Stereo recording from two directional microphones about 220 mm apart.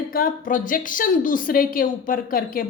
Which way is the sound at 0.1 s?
40° left (ahead or behind).